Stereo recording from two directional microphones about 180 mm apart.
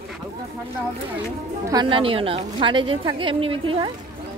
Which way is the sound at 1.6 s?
25° right (ahead or behind).